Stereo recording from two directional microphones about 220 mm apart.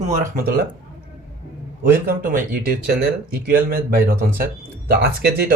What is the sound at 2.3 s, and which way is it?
Speech, 40° right (ahead or behind).